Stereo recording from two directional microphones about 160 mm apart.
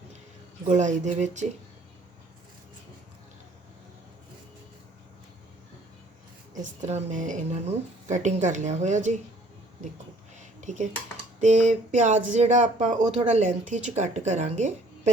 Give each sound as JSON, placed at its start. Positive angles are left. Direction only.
{"t": 0.7, "sound": "speech", "side_deg": -50}
{"t": 6.5, "sound": "speech", "side_deg": -45}
{"t": 10.3, "sound": "a sound", "side_deg": -50}
{"t": 11.3, "sound": "speech", "side_deg": -50}